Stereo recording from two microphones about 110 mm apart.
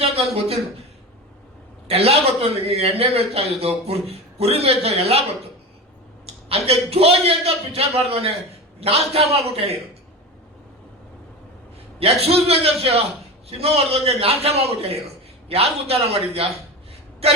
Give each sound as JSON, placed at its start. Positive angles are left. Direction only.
{"t": 0.0, "sound": "speech", "side_deg": -70}
{"t": 1.9, "sound": "a man's voice", "side_deg": -65}
{"t": 6.5, "sound": "a man's voice", "side_deg": -65}
{"t": 11.9, "sound": "a man's voice", "side_deg": -65}